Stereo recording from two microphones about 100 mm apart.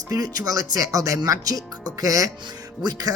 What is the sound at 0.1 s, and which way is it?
A man's voice, 35° right (ahead or behind).